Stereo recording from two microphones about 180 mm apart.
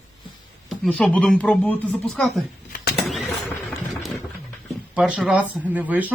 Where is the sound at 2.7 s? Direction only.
60° left (ahead or behind).